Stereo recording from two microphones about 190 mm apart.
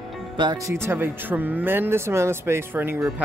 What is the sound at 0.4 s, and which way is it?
Speech, 20° right (ahead or behind).